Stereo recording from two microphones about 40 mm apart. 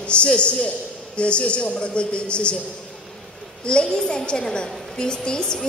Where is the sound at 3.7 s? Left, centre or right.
Left.